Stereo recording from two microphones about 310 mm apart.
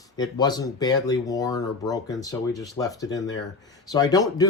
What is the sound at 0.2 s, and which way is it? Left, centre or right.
Speech, centre.